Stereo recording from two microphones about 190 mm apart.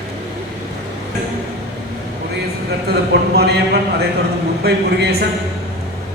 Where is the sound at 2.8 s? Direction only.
60° right (ahead or behind).